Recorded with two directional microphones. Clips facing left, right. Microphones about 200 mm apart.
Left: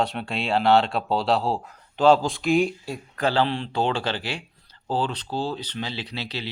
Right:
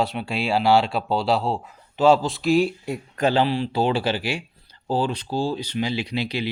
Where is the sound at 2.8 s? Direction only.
20° right (ahead or behind).